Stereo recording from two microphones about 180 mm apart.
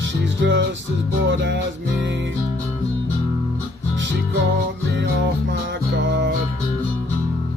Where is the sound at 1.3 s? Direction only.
80° right.